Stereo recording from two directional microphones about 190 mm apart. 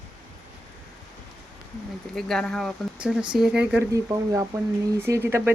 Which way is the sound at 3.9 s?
15° right (ahead or behind).